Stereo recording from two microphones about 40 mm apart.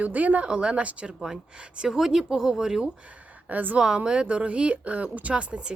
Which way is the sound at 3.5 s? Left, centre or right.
Right.